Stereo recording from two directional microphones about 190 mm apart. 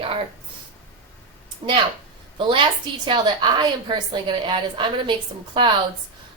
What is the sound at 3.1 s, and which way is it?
A woman's voice, 25° right (ahead or behind).